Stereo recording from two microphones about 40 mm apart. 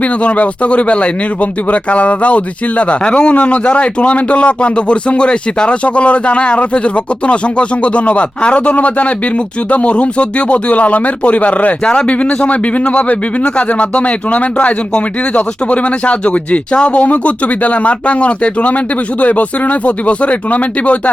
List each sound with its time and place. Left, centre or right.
0.0 s a man's voice: left